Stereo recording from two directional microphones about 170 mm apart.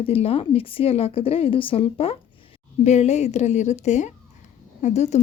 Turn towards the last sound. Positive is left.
turn(degrees=40)  # may be behind; listen again after turning